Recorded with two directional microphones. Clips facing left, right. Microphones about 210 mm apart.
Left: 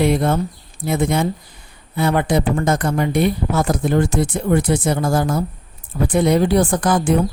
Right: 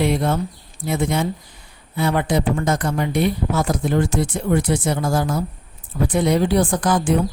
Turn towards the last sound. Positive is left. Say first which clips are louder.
# left 2 dB
turn(degrees=50)  # may be behind; listen again after turning